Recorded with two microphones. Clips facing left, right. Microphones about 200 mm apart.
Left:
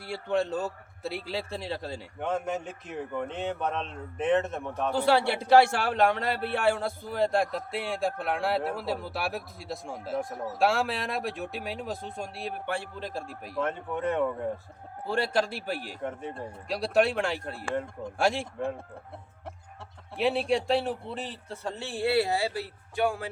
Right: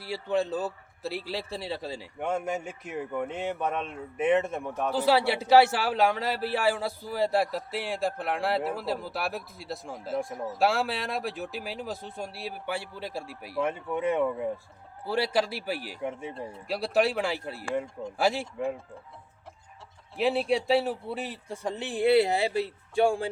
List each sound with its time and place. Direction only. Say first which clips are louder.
0.1 s a man's voice: even; 5° right (ahead or behind)
20.1 s speech: even; centre (ahead or behind); by 23.3 s 30° right (ahead or behind)